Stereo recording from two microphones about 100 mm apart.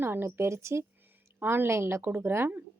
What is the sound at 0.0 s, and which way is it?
A woman's voice, 20° right (ahead or behind).